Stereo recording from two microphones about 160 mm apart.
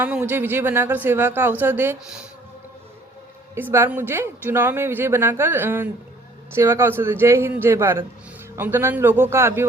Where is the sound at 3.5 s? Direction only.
15° right (ahead or behind).